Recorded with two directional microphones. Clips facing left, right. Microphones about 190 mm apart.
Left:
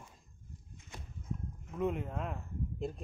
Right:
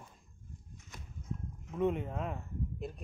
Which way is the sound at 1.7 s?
Centre (ahead or behind).